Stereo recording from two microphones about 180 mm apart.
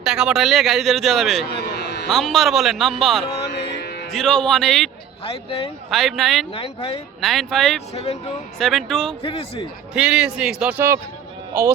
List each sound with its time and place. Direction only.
0.0 s a man's voice: 5° right (ahead or behind)
1.6 s a sound: 65° left (ahead or behind)
2.0 s a man's voice: centre (ahead or behind)
3.5 s music: 70° left (ahead or behind)
4.1 s a man's voice: 5° left (ahead or behind)
5.2 s speech: 30° left (ahead or behind)
5.9 s a man's voice: centre (ahead or behind)
6.5 s speech: 30° left (ahead or behind)
7.2 s a man's voice: centre (ahead or behind)
7.9 s speech: 35° left (ahead or behind)
8.5 s a man's voice: centre (ahead or behind)
9.2 s speech: 30° left (ahead or behind)
9.9 s a man's voice: 5° right (ahead or behind)